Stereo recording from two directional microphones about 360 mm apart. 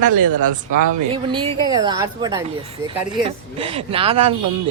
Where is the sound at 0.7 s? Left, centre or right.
Right.